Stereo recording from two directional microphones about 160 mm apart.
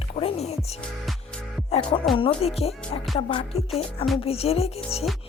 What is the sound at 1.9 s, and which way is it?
Speech, 30° left (ahead or behind).